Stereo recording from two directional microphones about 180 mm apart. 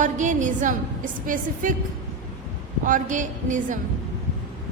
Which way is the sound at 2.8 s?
45° right (ahead or behind).